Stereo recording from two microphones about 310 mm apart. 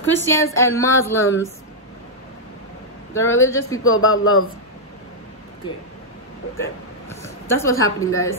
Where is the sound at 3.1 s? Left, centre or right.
Centre.